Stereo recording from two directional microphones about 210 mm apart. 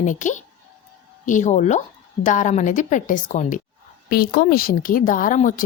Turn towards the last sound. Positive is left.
turn(degrees=40)  # may be behind; listen again after turning